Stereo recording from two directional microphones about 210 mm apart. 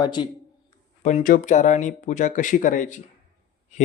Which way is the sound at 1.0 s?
40° left (ahead or behind).